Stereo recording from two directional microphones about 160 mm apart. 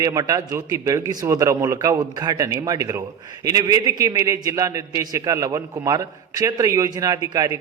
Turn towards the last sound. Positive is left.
turn(degrees=-25)  # may be behind; listen again after turning